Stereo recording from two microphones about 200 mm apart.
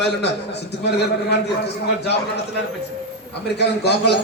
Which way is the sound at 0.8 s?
55° left (ahead or behind).